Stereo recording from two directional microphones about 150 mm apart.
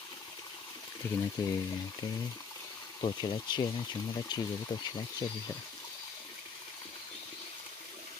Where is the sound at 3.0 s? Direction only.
30° left (ahead or behind).